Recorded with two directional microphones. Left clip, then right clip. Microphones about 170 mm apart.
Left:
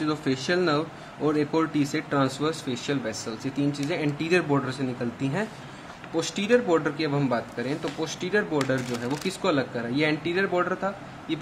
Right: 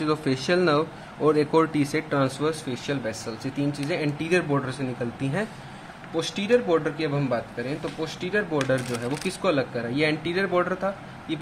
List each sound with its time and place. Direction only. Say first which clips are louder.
0.0 s a man's voice: right 2 dB; 20° right (ahead or behind)